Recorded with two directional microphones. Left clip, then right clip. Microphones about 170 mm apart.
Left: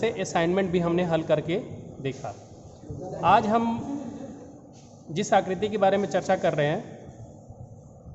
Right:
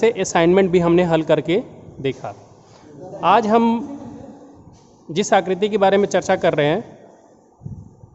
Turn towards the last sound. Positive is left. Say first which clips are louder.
# right 7 dB
turn(degrees=-55)  # may be behind; listen again after turning